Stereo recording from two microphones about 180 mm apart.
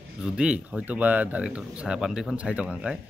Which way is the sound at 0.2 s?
5° right (ahead or behind).